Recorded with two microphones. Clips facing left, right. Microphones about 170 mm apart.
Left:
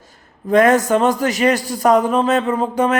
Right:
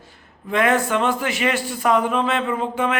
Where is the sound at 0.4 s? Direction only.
40° left (ahead or behind).